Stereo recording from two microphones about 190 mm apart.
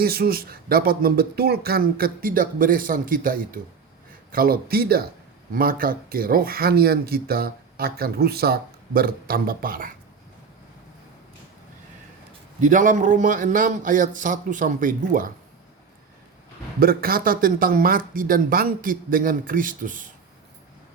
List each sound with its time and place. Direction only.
0.0 s speech: 55° right (ahead or behind)
12.5 s speech: 40° right (ahead or behind)
16.8 s speech: 50° right (ahead or behind)